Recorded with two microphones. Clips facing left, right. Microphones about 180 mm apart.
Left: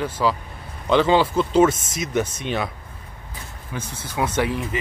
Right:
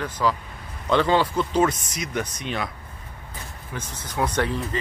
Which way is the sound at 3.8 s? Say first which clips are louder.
Left 1 dB; 5° left (ahead or behind).